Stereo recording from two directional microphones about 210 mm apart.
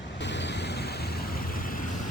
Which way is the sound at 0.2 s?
55° left (ahead or behind).